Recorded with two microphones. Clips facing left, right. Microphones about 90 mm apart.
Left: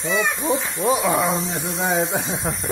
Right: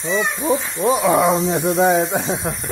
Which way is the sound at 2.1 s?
5° right (ahead or behind).